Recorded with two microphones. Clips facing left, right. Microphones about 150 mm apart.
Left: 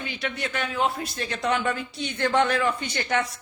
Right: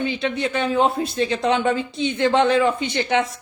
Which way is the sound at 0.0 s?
25° right (ahead or behind).